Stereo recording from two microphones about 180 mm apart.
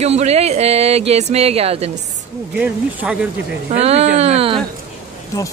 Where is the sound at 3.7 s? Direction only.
35° right (ahead or behind).